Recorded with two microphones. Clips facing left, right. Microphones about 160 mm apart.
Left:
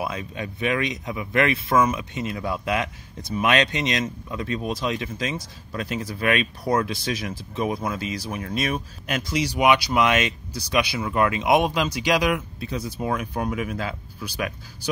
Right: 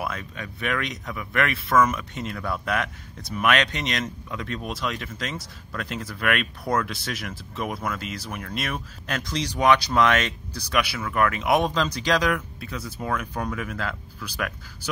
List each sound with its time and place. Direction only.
0.0 s speech: 20° left (ahead or behind)